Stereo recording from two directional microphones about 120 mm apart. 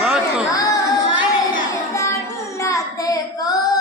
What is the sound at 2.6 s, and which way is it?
Child singing, 25° left (ahead or behind).